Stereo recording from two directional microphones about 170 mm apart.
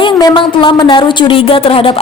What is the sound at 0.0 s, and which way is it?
Speech, 25° left (ahead or behind).